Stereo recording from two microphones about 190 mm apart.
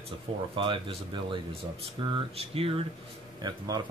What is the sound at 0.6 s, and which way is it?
Speech, 25° right (ahead or behind).